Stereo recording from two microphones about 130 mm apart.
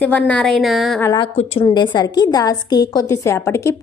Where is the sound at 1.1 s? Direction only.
50° left (ahead or behind).